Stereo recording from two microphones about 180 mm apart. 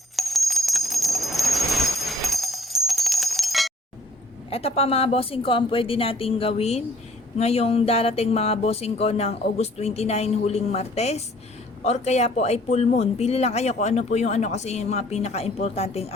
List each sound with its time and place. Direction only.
0.2 s bell: centre (ahead or behind)
4.4 s speech: 35° left (ahead or behind)